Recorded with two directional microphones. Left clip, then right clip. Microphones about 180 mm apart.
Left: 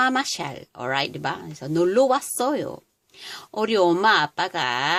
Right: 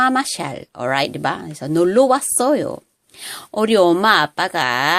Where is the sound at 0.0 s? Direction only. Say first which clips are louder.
Right 5 dB; 15° right (ahead or behind).